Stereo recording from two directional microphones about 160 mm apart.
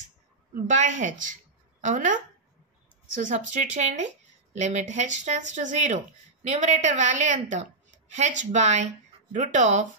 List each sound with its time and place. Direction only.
0.7 s speech: 50° right (ahead or behind)
3.2 s speech: 50° right (ahead or behind)